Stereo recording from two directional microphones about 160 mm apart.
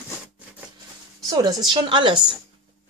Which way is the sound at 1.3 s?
25° right (ahead or behind).